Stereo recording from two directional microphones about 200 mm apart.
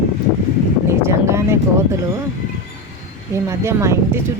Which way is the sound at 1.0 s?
15° right (ahead or behind).